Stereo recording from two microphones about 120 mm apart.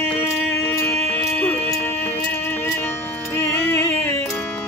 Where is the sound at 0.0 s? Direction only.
20° left (ahead or behind).